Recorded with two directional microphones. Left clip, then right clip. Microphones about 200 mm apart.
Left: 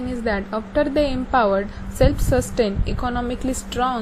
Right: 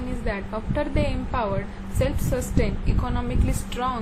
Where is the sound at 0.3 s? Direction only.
25° left (ahead or behind).